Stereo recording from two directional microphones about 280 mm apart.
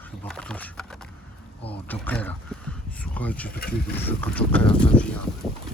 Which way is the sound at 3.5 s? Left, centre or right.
Left.